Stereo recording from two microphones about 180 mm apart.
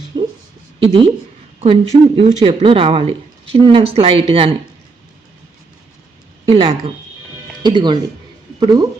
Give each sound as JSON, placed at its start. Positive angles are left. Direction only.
{"t": 0.1, "sound": "a sound", "side_deg": -25}
{"t": 1.6, "sound": "speech", "side_deg": -30}
{"t": 6.4, "sound": "a woman's voice", "side_deg": -30}